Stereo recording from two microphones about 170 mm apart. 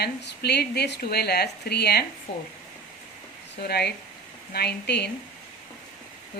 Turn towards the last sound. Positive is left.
turn(degrees=75)  # may be behind; listen again after turning